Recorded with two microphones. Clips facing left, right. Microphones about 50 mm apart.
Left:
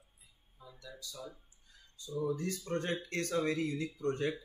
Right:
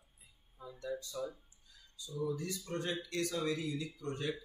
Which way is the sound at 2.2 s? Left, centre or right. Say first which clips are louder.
Left 2 dB; left.